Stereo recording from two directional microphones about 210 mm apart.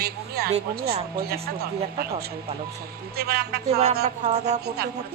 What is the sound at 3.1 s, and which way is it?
Music, 50° right (ahead or behind).